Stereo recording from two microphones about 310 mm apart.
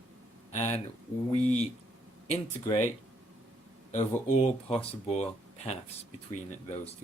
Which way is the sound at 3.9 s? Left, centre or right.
Left.